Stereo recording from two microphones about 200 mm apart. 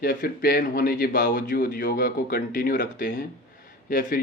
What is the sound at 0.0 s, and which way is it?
Speech, 45° left (ahead or behind).